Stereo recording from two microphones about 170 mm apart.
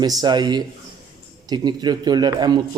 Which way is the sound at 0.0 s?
25° right (ahead or behind).